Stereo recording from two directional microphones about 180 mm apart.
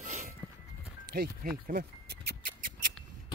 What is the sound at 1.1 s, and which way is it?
Speech, 55° right (ahead or behind).